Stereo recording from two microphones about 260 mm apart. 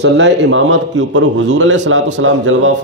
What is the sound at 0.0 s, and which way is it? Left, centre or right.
Speech, right.